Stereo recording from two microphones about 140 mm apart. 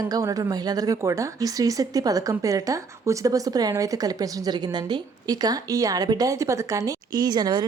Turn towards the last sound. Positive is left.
turn(degrees=-30)  # may be behind; listen again after turning